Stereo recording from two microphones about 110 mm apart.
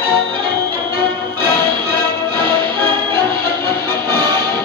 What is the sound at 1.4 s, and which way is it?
Music, 20° left (ahead or behind).